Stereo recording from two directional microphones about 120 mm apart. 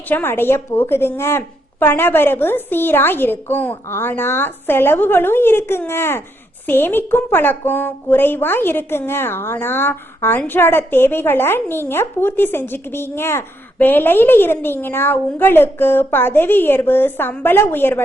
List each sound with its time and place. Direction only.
0.1 s a woman's voice: 15° left (ahead or behind)